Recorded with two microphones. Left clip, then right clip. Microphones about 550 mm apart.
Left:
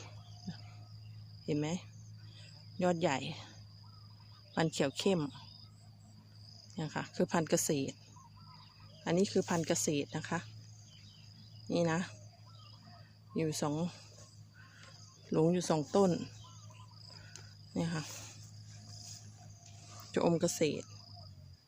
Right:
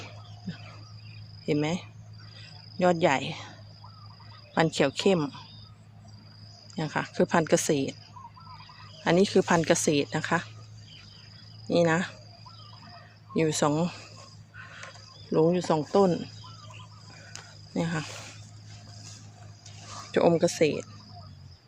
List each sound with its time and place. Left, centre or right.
1.5 s speech: right
4.5 s speech: right
6.7 s speech: right
9.0 s speech: right
11.6 s speech: right
13.3 s speech: right
15.3 s speech: right
17.7 s speech: right
20.1 s speech: right